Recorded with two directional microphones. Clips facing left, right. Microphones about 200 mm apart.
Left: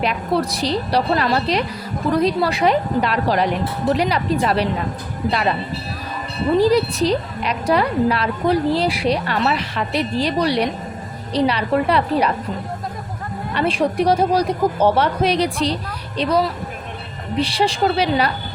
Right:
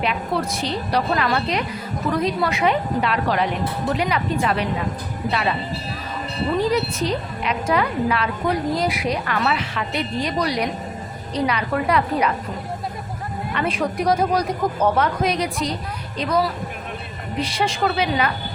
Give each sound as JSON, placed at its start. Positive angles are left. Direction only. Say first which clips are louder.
{"t": 0.0, "sound": "a woman's voice", "louder": "left 3 dB", "side_deg": 35}
{"t": 6.6, "sound": "a woman's voice", "louder": "left 6 dB", "side_deg": 35}
{"t": 13.5, "sound": "a woman's voice", "louder": "left 4 dB", "side_deg": 30}
{"t": 17.4, "sound": "a woman's voice", "louder": "left 3 dB", "side_deg": 35}